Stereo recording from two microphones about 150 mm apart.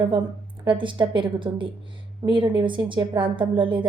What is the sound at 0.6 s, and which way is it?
A woman's voice, 35° right (ahead or behind).